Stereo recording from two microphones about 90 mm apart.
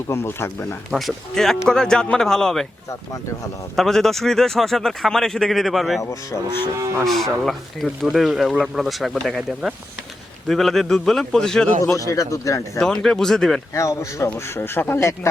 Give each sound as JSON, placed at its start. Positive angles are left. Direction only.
{"t": 0.1, "sound": "speech", "side_deg": 25}
{"t": 0.9, "sound": "speech", "side_deg": 0}
{"t": 3.8, "sound": "speech", "side_deg": 5}
{"t": 6.0, "sound": "speech", "side_deg": 35}
{"t": 7.0, "sound": "speech", "side_deg": 0}
{"t": 11.9, "sound": "speech", "side_deg": 40}
{"t": 12.8, "sound": "speech", "side_deg": 5}
{"t": 13.7, "sound": "speech", "side_deg": 35}